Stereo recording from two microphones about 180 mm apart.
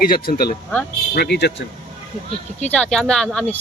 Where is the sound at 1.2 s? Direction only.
65° left (ahead or behind).